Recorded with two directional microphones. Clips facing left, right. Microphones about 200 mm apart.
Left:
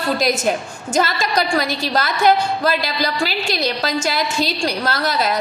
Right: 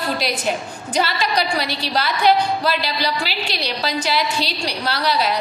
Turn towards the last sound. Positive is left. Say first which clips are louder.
# left 1 dB
turn(degrees=45)  # may be behind; listen again after turning